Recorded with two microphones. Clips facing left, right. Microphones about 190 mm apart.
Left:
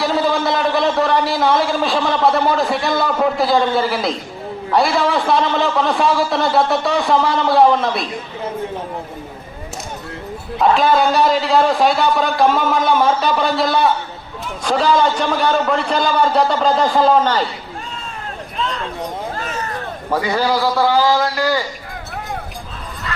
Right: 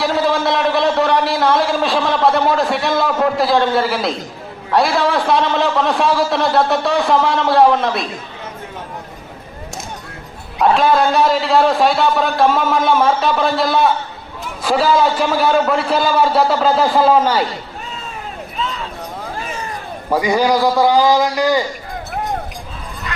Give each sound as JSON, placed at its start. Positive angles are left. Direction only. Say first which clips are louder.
{"t": 0.0, "sound": "a man's voice", "louder": "right 1 dB", "side_deg": 0}
{"t": 10.6, "sound": "a man's voice", "louder": "right 1 dB", "side_deg": 0}
{"t": 18.5, "sound": "a sound", "louder": "left 1 dB", "side_deg": -5}
{"t": 19.4, "sound": "a man's voice", "louder": "left 1 dB", "side_deg": -10}